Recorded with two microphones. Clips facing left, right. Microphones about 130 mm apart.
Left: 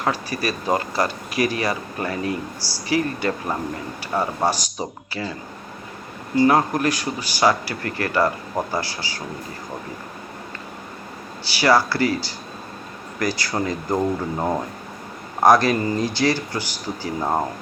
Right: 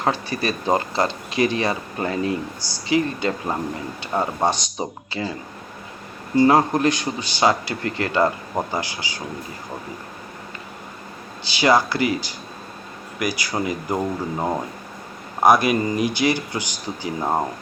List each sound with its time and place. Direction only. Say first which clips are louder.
0.0 s speech: right 1 dB; 25° right (ahead or behind)
6.3 s speech: right 1 dB; 25° right (ahead or behind)
11.4 s speech: even; 20° right (ahead or behind); by 14.6 s centre (ahead or behind)
15.4 s speech: left 1 dB; 15° right (ahead or behind)